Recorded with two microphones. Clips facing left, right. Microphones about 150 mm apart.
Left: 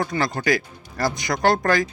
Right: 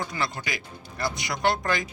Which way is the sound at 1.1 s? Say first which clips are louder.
Left 5 dB; 40° left (ahead or behind).